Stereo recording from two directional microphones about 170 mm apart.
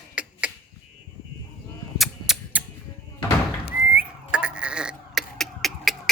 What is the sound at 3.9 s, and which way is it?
Goat, 10° right (ahead or behind).